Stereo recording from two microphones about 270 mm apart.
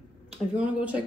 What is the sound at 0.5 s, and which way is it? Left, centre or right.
Speech, centre.